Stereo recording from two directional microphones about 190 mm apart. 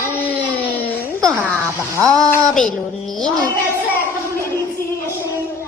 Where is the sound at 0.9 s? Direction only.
5° left (ahead or behind).